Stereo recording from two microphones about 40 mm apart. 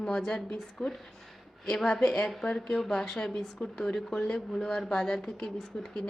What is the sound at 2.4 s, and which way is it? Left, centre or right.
A woman's voice, centre.